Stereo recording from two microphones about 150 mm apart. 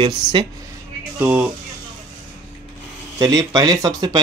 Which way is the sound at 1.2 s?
10° right (ahead or behind).